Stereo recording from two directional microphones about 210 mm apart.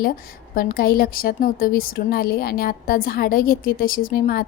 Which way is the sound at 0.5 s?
45° left (ahead or behind).